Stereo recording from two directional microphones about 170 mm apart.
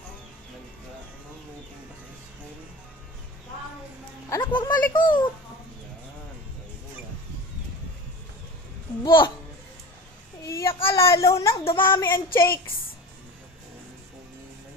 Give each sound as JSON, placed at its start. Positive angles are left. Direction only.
{"t": 4.3, "sound": "a child's voice", "side_deg": 25}
{"t": 9.0, "sound": "a child's voice", "side_deg": 30}
{"t": 10.4, "sound": "child singing", "side_deg": 15}
{"t": 10.8, "sound": "a sound", "side_deg": 15}